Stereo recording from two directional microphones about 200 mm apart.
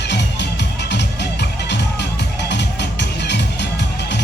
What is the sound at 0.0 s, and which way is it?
Music, 60° left (ahead or behind).